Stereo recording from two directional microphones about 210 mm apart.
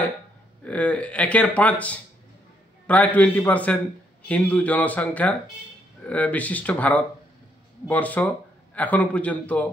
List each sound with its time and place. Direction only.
0.7 s speech: 5° left (ahead or behind)